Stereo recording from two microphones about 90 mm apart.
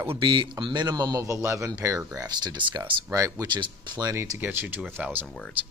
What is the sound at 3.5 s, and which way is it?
Speech, 55° right (ahead or behind).